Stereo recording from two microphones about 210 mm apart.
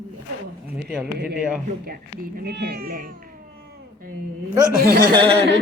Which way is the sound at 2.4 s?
50° right (ahead or behind).